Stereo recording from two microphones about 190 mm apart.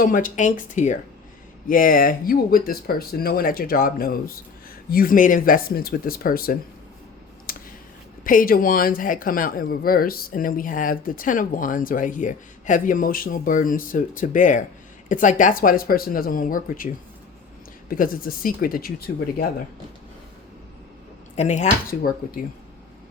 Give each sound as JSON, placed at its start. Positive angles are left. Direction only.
{"t": 0.0, "sound": "speech", "side_deg": 45}
{"t": 7.5, "sound": "a sound", "side_deg": 50}
{"t": 8.2, "sound": "speech", "side_deg": 45}
{"t": 21.3, "sound": "speech", "side_deg": 40}